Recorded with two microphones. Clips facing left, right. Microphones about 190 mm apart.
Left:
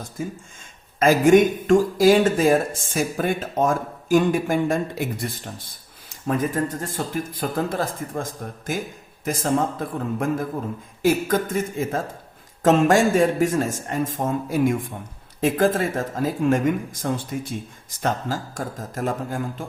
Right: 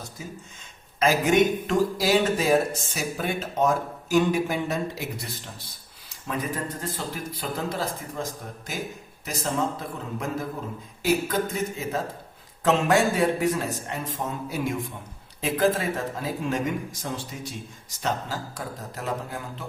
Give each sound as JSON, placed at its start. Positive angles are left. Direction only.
{"t": 0.2, "sound": "speech", "side_deg": 50}